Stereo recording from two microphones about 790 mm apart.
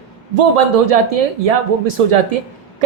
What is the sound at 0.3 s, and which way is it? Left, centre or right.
A woman's voice, right.